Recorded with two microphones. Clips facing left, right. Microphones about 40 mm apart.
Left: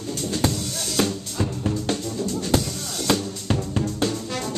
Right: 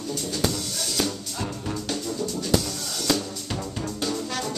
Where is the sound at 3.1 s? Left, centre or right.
Left.